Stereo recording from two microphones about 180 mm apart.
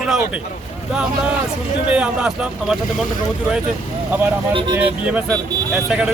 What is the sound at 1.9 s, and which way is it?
Speech, 5° right (ahead or behind).